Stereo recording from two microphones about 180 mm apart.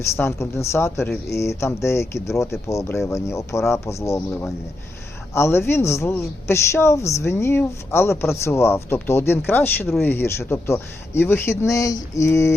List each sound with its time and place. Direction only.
0.0 s speech: 15° left (ahead or behind)